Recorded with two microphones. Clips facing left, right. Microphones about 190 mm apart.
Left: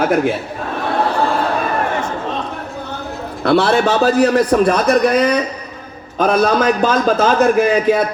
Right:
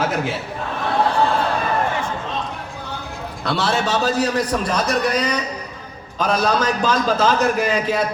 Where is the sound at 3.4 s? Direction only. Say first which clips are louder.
Left 8 dB; 60° left (ahead or behind).